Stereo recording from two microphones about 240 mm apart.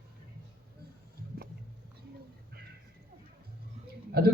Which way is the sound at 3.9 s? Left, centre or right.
Right.